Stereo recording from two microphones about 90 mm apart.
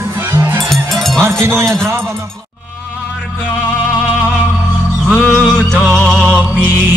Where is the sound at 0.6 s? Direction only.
Centre (ahead or behind).